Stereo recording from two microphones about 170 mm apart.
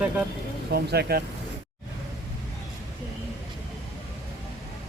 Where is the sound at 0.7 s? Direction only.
65° right (ahead or behind).